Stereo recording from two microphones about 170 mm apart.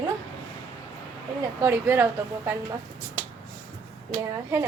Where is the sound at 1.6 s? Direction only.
15° right (ahead or behind).